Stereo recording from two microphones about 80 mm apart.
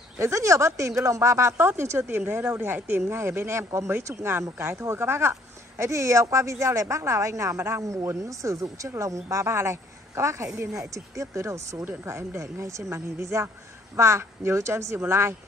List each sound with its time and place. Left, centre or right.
0.2 s speech: right
11.8 s speech: right